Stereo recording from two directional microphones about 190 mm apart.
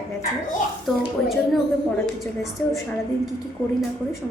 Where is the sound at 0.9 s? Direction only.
Centre (ahead or behind).